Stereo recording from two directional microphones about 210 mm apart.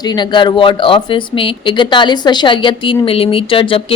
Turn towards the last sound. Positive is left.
turn(degrees=25)  # may be behind; listen again after turning